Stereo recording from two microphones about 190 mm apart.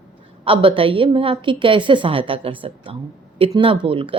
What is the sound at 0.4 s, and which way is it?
A woman's voice, 25° right (ahead or behind).